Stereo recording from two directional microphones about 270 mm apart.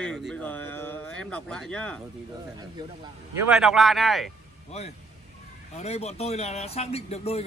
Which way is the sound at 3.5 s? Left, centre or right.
Centre.